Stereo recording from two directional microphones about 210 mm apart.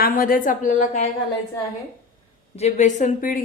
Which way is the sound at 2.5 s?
35° left (ahead or behind).